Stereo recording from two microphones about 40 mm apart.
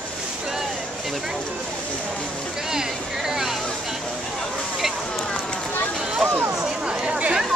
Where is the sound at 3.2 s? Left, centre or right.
Centre.